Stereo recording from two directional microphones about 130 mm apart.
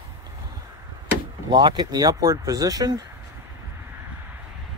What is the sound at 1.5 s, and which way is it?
Speech, 35° right (ahead or behind).